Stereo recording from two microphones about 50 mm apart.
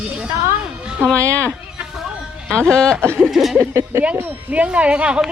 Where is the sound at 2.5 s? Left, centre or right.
Centre.